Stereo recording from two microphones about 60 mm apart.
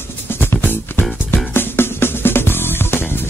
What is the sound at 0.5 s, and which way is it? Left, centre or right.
Music, left.